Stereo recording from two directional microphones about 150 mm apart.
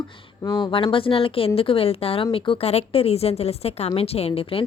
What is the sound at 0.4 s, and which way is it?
A woman's voice, 30° left (ahead or behind).